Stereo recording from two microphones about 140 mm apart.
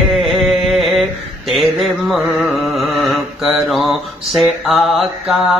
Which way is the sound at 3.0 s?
Centre (ahead or behind).